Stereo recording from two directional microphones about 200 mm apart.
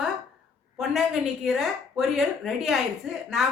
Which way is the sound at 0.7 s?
Centre (ahead or behind).